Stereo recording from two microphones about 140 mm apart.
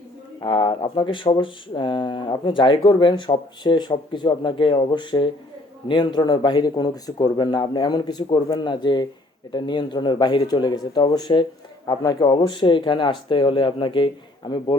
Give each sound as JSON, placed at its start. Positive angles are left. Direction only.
{"t": 0.3, "sound": "speech", "side_deg": 35}